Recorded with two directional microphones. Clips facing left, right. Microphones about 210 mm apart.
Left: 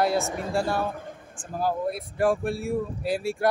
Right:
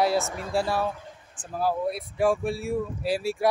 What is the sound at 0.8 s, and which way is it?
Speech, 55° left (ahead or behind).